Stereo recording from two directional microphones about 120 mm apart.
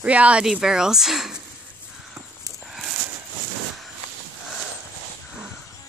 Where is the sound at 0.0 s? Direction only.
10° right (ahead or behind).